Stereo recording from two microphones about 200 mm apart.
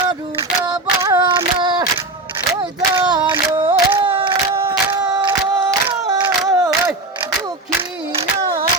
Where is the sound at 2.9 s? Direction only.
20° right (ahead or behind).